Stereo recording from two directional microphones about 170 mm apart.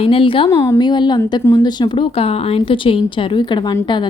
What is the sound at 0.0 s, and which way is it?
Speech, 35° left (ahead or behind).